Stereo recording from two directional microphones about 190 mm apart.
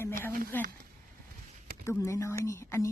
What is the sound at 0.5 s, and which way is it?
Speech, 10° left (ahead or behind).